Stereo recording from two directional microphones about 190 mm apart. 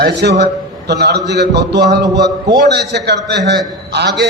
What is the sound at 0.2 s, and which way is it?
A man's voice, 65° right (ahead or behind).